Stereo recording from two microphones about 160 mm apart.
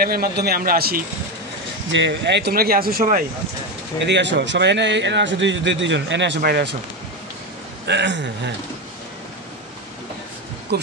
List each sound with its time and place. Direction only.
0.0 s speech: 75° right (ahead or behind)
2.0 s speech: 90° right; by 3.2 s 65° right (ahead or behind)
4.0 s a man's voice: 90° right
7.8 s a man's voice: 90° right
10.7 s speech: 90° right